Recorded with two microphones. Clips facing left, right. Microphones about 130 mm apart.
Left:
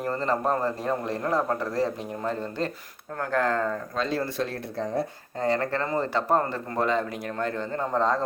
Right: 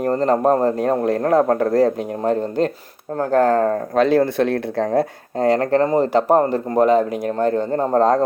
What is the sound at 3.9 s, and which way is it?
Speech, 65° right (ahead or behind).